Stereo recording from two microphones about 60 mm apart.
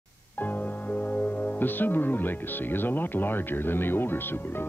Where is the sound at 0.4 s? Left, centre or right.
Left.